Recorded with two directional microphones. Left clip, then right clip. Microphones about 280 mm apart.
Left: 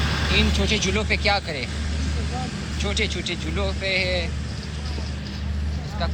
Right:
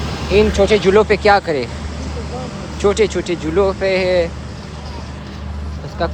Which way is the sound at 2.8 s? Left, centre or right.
Centre.